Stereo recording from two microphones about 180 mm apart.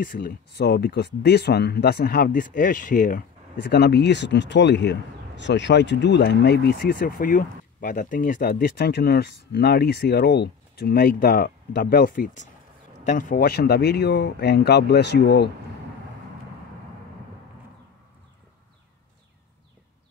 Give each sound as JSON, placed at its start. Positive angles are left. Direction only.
{"t": 0.0, "sound": "speech", "side_deg": 50}